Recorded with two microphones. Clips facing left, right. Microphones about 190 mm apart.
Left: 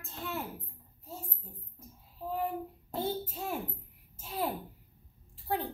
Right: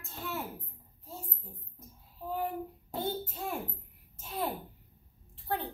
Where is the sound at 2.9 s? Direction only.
5° left (ahead or behind).